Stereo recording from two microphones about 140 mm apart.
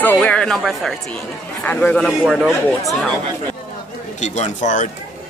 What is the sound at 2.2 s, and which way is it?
Speech, 5° right (ahead or behind).